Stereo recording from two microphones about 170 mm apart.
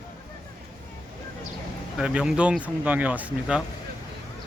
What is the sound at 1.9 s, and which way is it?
Speech, 5° right (ahead or behind).